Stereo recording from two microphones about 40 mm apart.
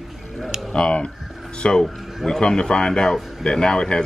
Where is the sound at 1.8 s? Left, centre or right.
Centre.